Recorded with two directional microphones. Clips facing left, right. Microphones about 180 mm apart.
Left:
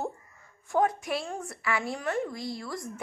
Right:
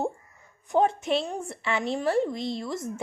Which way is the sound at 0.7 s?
25° right (ahead or behind).